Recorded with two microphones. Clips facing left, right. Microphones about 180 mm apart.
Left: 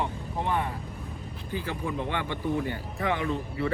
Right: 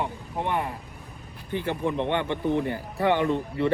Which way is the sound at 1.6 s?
30° right (ahead or behind).